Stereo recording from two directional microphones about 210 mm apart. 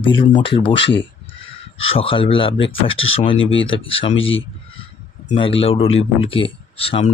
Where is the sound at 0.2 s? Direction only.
25° left (ahead or behind).